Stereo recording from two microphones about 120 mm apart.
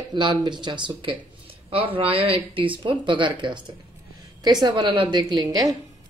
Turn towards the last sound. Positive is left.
turn(degrees=-35)  # may be behind; listen again after turning